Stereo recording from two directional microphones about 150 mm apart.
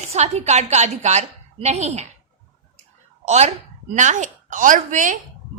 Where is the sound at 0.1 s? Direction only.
45° right (ahead or behind).